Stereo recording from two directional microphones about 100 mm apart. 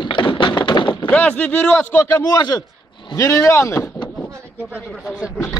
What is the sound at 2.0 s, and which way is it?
Speech, 25° left (ahead or behind).